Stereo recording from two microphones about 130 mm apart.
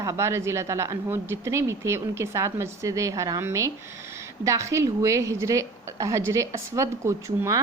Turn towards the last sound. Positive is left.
turn(degrees=-20)  # may be behind; listen again after turning